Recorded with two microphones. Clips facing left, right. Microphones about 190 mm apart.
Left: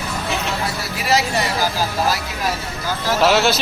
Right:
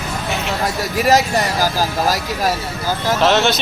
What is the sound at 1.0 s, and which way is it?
Speech, 45° right (ahead or behind).